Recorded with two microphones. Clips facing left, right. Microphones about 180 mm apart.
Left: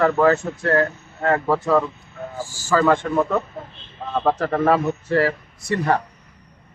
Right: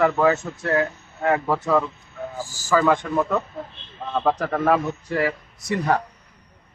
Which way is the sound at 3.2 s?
Centre (ahead or behind).